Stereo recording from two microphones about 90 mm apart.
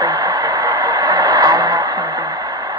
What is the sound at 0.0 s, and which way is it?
Radio, 45° right (ahead or behind).